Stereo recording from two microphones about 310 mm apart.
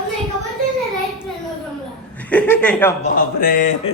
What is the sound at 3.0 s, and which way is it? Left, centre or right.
Speech, left.